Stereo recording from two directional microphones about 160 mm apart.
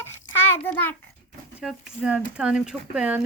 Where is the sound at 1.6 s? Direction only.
5° right (ahead or behind).